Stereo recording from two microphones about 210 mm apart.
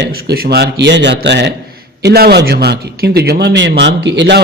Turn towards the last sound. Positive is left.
turn(degrees=-55)  # may be behind; listen again after turning